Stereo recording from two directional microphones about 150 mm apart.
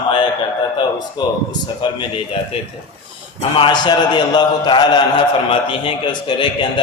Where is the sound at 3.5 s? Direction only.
30° left (ahead or behind).